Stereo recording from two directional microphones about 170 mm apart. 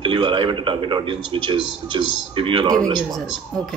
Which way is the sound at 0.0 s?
30° right (ahead or behind).